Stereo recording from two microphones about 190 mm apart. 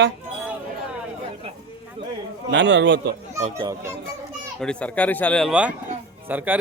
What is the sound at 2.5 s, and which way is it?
Speech, 70° right (ahead or behind).